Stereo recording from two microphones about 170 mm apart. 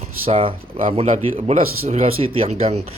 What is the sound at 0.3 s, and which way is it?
Speech, 35° right (ahead or behind).